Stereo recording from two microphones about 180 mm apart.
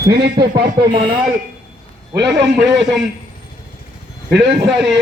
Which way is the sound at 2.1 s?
75° right (ahead or behind).